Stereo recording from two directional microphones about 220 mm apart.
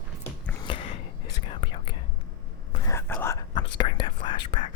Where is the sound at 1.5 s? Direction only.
25° left (ahead or behind).